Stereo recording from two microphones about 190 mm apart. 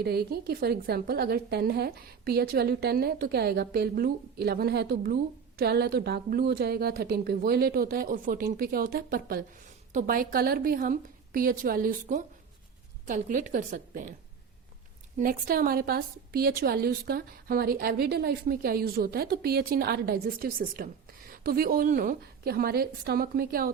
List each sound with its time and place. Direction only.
0.0 s a woman's voice: 55° right (ahead or behind)
15.2 s a woman's voice: 50° right (ahead or behind)